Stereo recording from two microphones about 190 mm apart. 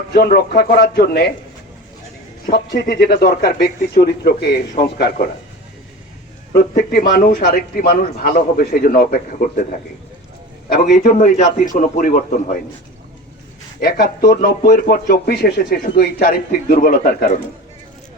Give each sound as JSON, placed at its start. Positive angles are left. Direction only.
{"t": 0.1, "sound": "speech", "side_deg": 55}
{"t": 2.5, "sound": "speech", "side_deg": 55}
{"t": 6.5, "sound": "speech", "side_deg": 50}
{"t": 10.7, "sound": "speech", "side_deg": 45}
{"t": 13.8, "sound": "speech", "side_deg": 50}